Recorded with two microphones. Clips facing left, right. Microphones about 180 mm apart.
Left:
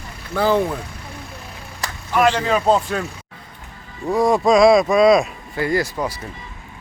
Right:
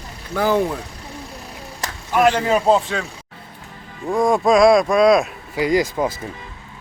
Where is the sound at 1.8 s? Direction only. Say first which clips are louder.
Right 1 dB; 10° right (ahead or behind).